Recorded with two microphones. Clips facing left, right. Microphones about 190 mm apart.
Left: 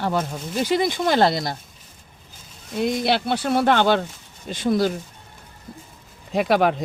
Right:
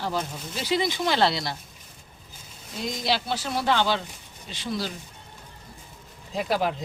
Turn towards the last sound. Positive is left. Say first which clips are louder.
# left 7 dB
turn(degrees=70)  # may be behind; listen again after turning